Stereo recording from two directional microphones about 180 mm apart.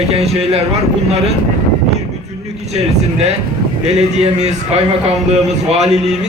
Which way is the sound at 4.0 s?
40° right (ahead or behind).